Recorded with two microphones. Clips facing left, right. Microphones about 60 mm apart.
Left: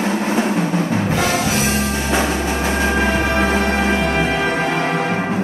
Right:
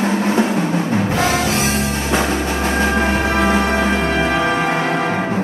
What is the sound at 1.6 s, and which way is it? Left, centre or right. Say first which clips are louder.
Music: even; right.